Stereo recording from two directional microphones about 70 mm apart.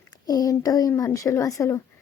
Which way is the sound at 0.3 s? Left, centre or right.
Left.